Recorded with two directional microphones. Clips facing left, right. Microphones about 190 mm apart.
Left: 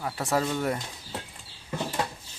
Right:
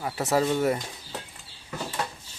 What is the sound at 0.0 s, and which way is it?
Speech, 5° right (ahead or behind).